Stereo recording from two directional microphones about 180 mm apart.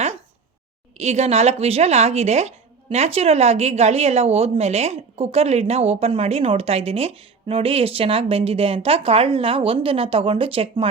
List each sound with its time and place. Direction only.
0.9 s speech: 35° right (ahead or behind)